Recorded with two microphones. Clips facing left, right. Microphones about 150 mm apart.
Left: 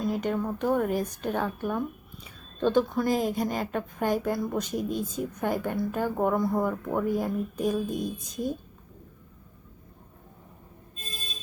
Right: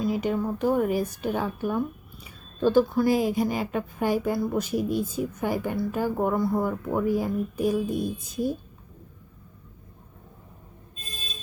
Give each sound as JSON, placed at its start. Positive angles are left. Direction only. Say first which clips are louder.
{"t": 0.0, "sound": "speech", "louder": "right 2 dB", "side_deg": -5}